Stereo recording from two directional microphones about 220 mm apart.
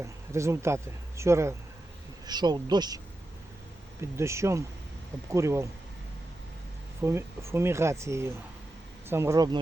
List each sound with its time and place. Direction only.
0.0 s speech: 15° right (ahead or behind)
4.2 s speech: 10° right (ahead or behind)
7.0 s speech: 10° right (ahead or behind)